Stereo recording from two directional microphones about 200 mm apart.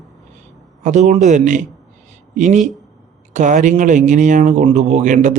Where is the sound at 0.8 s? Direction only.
35° right (ahead or behind).